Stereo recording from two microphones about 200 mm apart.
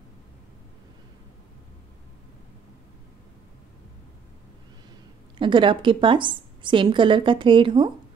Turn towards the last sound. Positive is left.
turn(degrees=-25)  # may be behind; listen again after turning